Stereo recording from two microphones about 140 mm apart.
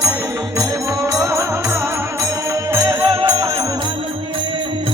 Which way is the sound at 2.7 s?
25° right (ahead or behind).